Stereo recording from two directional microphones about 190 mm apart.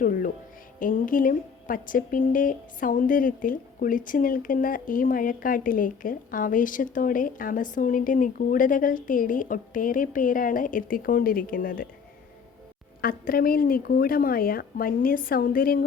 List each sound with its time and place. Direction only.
0.0 s music: 45° left (ahead or behind)
0.8 s a woman's voice: 45° left (ahead or behind)
13.0 s a woman's voice: 50° left (ahead or behind)